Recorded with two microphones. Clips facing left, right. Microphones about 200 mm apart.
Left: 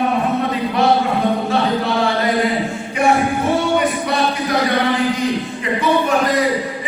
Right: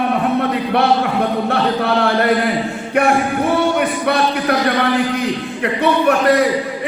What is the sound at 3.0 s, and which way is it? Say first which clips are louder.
Music: right 2 dB; 60° right (ahead or behind).